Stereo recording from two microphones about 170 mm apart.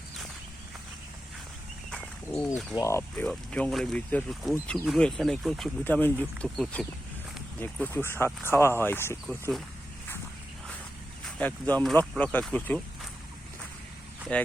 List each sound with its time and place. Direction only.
1.9 s a sound: 5° left (ahead or behind)
2.7 s speech: 15° left (ahead or behind)
3.2 s speech: 5° left (ahead or behind)
9.2 s speech: centre (ahead or behind)
11.3 s speech: 10° left (ahead or behind)